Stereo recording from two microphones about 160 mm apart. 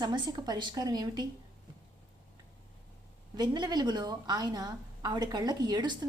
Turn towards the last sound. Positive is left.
turn(degrees=-25)  # may be behind; listen again after turning